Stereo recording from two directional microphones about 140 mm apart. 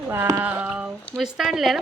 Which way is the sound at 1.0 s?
Centre (ahead or behind).